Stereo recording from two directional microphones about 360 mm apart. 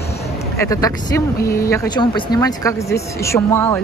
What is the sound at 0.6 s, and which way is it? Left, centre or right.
Speech, centre.